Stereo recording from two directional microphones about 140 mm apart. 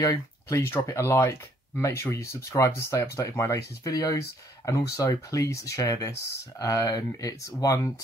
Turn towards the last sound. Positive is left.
turn(degrees=25)  # may be behind; listen again after turning